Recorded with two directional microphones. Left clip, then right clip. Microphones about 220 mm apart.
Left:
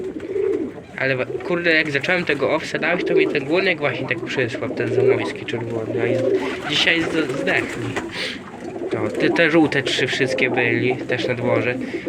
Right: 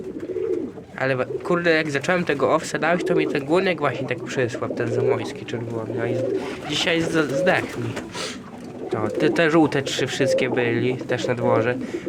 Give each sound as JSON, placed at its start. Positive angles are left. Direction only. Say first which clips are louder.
{"t": 1.0, "sound": "speech", "louder": "left 1 dB", "side_deg": -15}
{"t": 6.7, "sound": "speech", "louder": "left 4 dB", "side_deg": -20}
{"t": 7.1, "sound": "speech", "louder": "right 1 dB", "side_deg": -30}
{"t": 8.9, "sound": "speech", "louder": "left 1 dB", "side_deg": -15}